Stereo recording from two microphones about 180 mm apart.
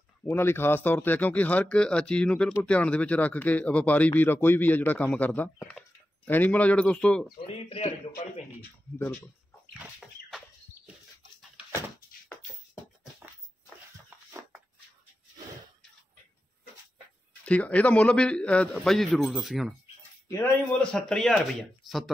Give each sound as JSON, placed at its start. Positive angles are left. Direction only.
{"t": 0.3, "sound": "speech", "side_deg": 10}
{"t": 7.4, "sound": "a man's voice", "side_deg": 35}
{"t": 8.9, "sound": "speech", "side_deg": 15}
{"t": 9.8, "sound": "a man's voice", "side_deg": 0}
{"t": 17.5, "sound": "a man's voice", "side_deg": 5}
{"t": 20.2, "sound": "a man's voice", "side_deg": 15}